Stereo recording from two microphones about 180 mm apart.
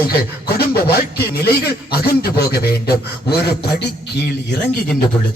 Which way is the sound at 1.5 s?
60° left (ahead or behind).